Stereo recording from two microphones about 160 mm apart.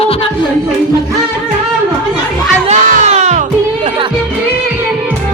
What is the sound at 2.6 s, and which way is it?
Music, 45° right (ahead or behind).